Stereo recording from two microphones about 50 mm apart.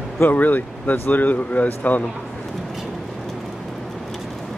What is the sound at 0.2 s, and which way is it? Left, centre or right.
Speech, left.